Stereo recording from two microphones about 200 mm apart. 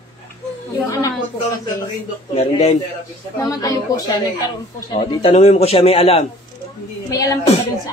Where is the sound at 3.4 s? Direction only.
20° left (ahead or behind).